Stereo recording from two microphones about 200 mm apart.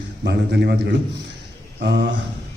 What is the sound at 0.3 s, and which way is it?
Speech, 55° right (ahead or behind).